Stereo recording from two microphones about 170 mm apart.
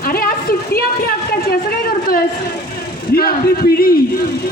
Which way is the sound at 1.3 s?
60° left (ahead or behind).